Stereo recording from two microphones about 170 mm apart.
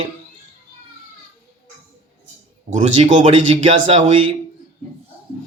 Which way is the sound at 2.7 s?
40° right (ahead or behind).